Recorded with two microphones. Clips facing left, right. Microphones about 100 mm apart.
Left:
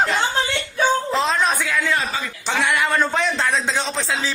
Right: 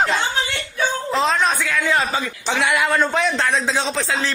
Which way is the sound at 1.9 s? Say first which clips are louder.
Right 4 dB; 25° right (ahead or behind).